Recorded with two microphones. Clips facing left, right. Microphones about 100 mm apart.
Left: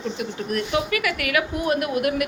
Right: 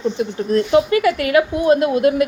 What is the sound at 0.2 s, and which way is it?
A woman's voice, 30° right (ahead or behind).